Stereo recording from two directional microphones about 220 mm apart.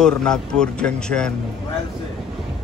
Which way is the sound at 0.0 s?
5° left (ahead or behind).